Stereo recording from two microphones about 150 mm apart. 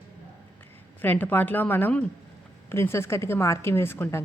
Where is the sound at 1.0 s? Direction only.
10° left (ahead or behind).